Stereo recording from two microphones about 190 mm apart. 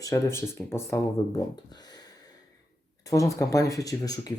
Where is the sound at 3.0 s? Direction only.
15° left (ahead or behind).